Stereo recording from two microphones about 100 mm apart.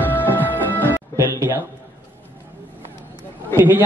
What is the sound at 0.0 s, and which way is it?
Music, 20° left (ahead or behind).